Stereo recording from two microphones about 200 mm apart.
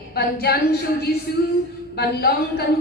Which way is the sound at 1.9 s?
55° left (ahead or behind).